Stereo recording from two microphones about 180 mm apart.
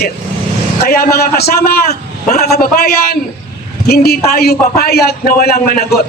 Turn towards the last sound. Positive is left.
turn(degrees=55)  # may be behind; listen again after turning